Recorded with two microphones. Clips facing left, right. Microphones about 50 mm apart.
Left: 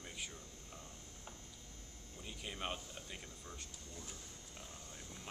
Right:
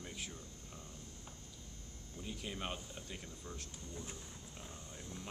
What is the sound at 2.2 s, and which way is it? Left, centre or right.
Speech, centre.